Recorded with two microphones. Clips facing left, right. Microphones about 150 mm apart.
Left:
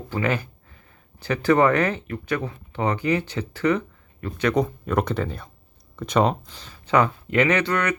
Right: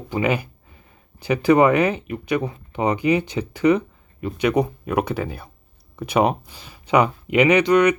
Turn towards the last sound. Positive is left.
turn(degrees=-15)  # may be behind; listen again after turning